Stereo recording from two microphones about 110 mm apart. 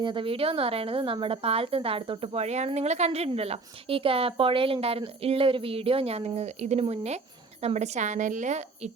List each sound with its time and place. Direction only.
0.0 s a woman's voice: 50° right (ahead or behind); by 8.9 s 90° right